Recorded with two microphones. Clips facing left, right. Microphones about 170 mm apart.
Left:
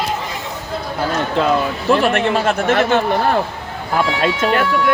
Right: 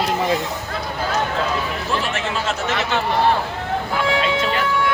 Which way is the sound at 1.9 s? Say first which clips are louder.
Left 11 dB; 60° left (ahead or behind).